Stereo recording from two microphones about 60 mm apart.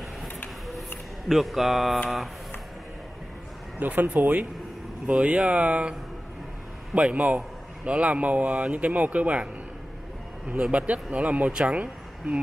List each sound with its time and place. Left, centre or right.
1.3 s speech: centre
3.8 s speech: right
10.5 s speech: right